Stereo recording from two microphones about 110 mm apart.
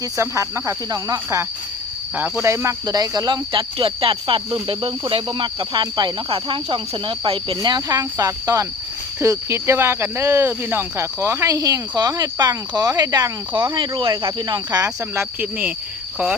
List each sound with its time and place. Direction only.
0.2 s speech: 25° right (ahead or behind)
2.1 s speech: 15° right (ahead or behind)
2.8 s speech: 35° right (ahead or behind)
3.8 s speech: 55° right (ahead or behind)
6.3 s speech: 55° right (ahead or behind)
7.5 s speech: 40° right (ahead or behind)
13.5 s speech: 45° right (ahead or behind)
15.1 s speech: 20° right (ahead or behind)